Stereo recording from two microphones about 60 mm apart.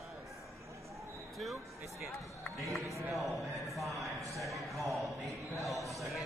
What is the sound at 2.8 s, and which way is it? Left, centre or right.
Speech, right.